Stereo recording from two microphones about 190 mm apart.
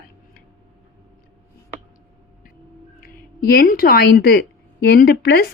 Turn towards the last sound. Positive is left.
turn(degrees=55)  # may be behind; listen again after turning